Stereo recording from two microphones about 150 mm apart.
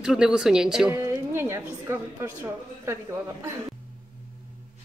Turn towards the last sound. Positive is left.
turn(degrees=-15)  # may be behind; listen again after turning